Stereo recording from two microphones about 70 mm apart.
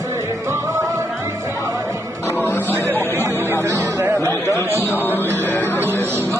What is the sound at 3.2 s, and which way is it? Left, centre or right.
Chatter, right.